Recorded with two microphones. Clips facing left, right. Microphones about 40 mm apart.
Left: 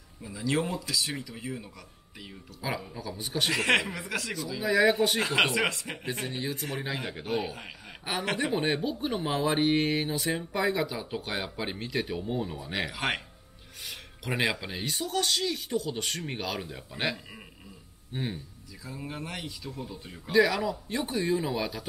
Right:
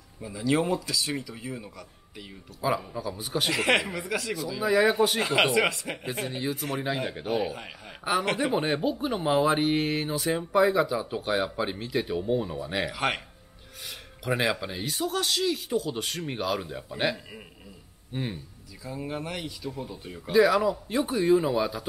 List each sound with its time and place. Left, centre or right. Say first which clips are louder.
0.2 s speech: right 3 dB; centre
19.7 s speech: right 2 dB; centre
20.1 s speech: right 3 dB; centre